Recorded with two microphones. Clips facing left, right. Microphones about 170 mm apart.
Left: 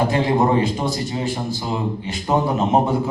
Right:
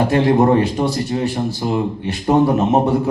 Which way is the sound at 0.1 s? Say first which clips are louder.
Right 4 dB; 65° right (ahead or behind).